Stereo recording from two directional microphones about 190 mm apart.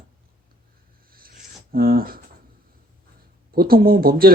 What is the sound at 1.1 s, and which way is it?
Writing, 50° right (ahead or behind).